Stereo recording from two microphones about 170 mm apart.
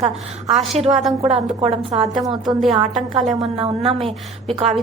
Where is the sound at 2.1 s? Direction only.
25° right (ahead or behind).